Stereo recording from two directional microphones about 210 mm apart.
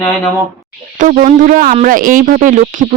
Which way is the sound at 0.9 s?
35° right (ahead or behind).